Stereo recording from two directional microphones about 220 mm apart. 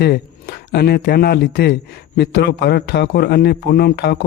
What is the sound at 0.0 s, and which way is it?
A man's voice, 45° left (ahead or behind).